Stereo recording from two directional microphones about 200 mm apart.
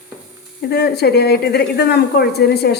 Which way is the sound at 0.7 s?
55° left (ahead or behind).